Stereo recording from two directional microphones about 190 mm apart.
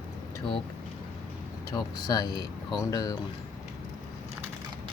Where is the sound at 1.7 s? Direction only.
20° left (ahead or behind).